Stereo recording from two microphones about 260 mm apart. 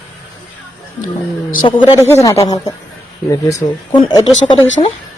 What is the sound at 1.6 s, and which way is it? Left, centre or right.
A man's voice, centre.